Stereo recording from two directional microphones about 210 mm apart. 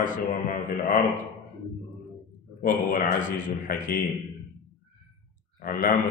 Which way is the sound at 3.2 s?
40° left (ahead or behind).